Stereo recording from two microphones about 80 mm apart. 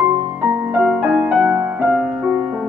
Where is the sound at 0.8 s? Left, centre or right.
Centre.